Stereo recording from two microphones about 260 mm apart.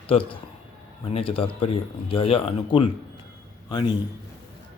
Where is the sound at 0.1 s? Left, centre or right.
Left.